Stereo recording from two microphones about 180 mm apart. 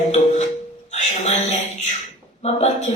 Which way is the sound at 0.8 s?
40° left (ahead or behind).